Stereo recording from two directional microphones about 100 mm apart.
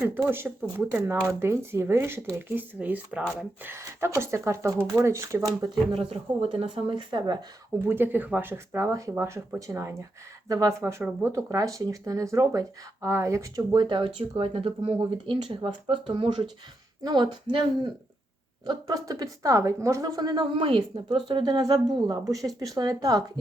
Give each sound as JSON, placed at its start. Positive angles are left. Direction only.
{"t": 0.0, "sound": "speech", "side_deg": -20}
{"t": 3.6, "sound": "speech", "side_deg": -25}
{"t": 5.9, "sound": "speech", "side_deg": -75}
{"t": 6.7, "sound": "speech", "side_deg": -55}
{"t": 7.9, "sound": "speech", "side_deg": -20}
{"t": 13.7, "sound": "speech", "side_deg": -55}
{"t": 15.3, "sound": "speech", "side_deg": -55}
{"t": 17.0, "sound": "a woman's voice", "side_deg": -45}
{"t": 18.6, "sound": "speech", "side_deg": -40}
{"t": 20.6, "sound": "speech", "side_deg": -55}